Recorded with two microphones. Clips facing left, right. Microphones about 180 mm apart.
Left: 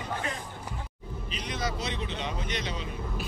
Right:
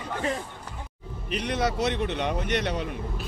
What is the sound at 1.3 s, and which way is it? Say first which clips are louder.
A man's voice: right 7 dB; 65° right (ahead or behind).